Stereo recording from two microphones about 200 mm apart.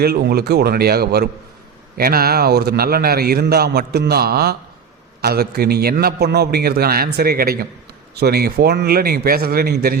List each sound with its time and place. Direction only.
0.0 s a man's voice: 50° right (ahead or behind)